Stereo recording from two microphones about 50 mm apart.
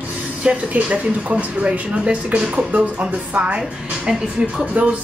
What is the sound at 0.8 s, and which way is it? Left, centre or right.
A woman's voice, right.